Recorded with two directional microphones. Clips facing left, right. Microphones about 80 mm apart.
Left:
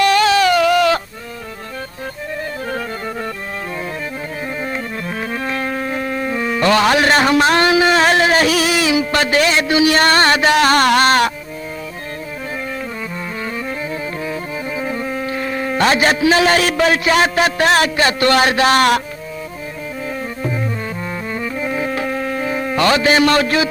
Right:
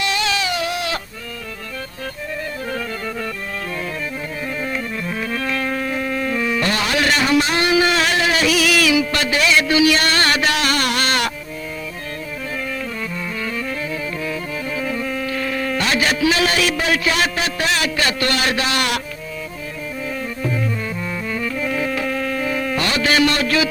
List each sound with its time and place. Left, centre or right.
0.0 s a sound: left
5.3 s music: left
6.7 s a sound: left
7.9 s a sound: left
8.6 s music: left
9.0 s music: left
9.7 s a man's voice: left
14.8 s a sound: left
15.8 s a man's voice: left
17.4 s a man's voice: left
21.6 s insect: left
23.2 s a man's voice: left